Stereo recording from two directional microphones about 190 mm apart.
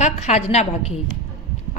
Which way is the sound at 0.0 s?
35° left (ahead or behind).